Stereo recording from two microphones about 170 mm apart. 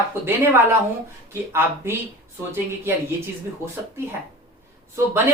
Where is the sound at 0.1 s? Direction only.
15° right (ahead or behind).